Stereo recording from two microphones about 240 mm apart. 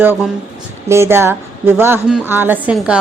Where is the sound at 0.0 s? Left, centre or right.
Centre.